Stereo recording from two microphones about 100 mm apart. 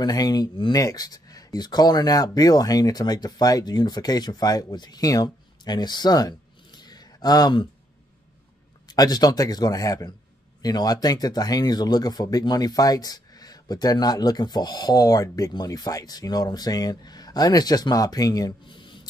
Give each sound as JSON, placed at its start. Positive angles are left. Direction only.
{"t": 0.0, "sound": "speech", "side_deg": 40}
{"t": 8.8, "sound": "speech", "side_deg": 40}
{"t": 18.7, "sound": "a sound", "side_deg": 55}